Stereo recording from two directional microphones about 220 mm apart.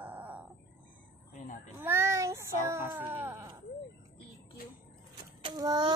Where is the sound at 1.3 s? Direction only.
35° left (ahead or behind).